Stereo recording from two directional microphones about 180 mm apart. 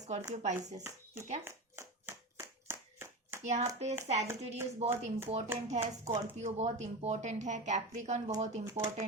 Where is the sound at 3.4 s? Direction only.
40° right (ahead or behind).